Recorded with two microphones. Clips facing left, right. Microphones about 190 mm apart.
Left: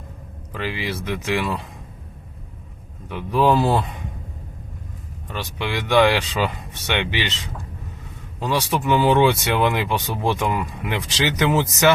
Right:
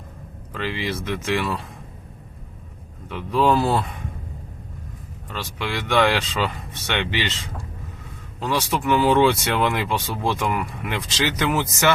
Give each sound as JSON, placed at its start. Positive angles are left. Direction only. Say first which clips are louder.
{"t": 0.5, "sound": "speech", "louder": "even", "side_deg": 15}
{"t": 3.1, "sound": "speech", "louder": "left 1 dB", "side_deg": 15}
{"t": 5.3, "sound": "speech", "louder": "left 2 dB", "side_deg": 15}